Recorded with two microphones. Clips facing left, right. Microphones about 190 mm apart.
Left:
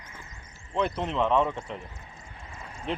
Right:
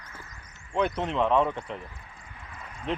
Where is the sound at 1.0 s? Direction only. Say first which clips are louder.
Even; centre (ahead or behind).